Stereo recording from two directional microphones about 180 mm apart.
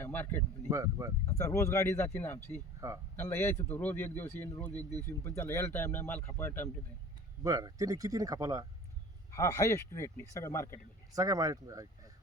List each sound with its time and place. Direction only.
0.0 s speech: 10° left (ahead or behind)
0.7 s speech: 15° right (ahead or behind)
1.3 s speech: 15° left (ahead or behind)
2.8 s speech: 20° right (ahead or behind)
3.2 s speech: 15° left (ahead or behind)
7.4 s speech: 20° right (ahead or behind)
9.3 s speech: 20° left (ahead or behind)
11.1 s speech: 20° right (ahead or behind)